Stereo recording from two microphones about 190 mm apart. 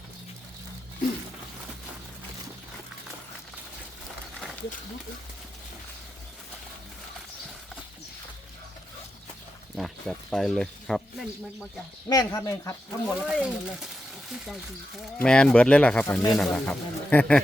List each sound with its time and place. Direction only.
9.7 s speech: centre (ahead or behind)
12.0 s speech: 20° left (ahead or behind)
13.1 s speech: 5° right (ahead or behind)
14.9 s speech: 5° left (ahead or behind)